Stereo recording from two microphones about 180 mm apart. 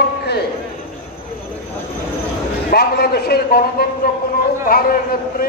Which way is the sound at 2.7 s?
60° left (ahead or behind).